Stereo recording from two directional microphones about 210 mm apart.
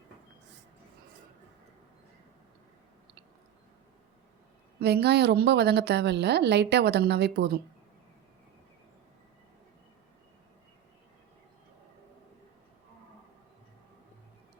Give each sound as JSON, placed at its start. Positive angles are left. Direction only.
{"t": 4.8, "sound": "a woman's voice", "side_deg": -50}